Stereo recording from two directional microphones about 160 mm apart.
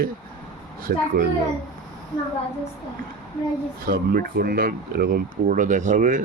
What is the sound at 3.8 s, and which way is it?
Speech, 65° right (ahead or behind).